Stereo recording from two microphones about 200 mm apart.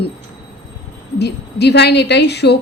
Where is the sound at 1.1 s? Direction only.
55° left (ahead or behind).